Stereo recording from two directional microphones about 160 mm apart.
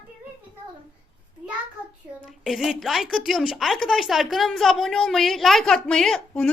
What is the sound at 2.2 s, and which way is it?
A woman's voice, centre (ahead or behind).